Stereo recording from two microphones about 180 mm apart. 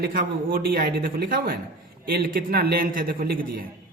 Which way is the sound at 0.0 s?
50° right (ahead or behind).